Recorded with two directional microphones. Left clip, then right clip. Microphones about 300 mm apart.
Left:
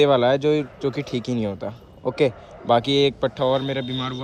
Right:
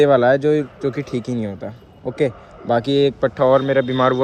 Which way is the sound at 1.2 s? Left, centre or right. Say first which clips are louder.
Even; left.